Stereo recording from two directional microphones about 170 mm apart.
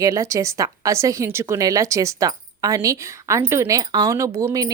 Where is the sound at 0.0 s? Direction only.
20° right (ahead or behind).